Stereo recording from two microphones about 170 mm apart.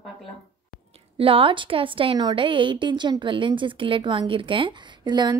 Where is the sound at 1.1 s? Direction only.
30° right (ahead or behind).